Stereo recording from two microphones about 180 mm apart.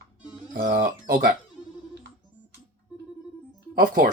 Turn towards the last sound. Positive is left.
turn(degrees=-55)  # may be behind; listen again after turning